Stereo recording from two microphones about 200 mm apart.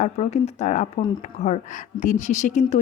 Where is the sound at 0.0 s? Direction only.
35° left (ahead or behind).